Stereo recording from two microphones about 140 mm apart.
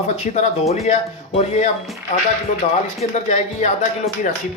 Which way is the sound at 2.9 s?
55° left (ahead or behind).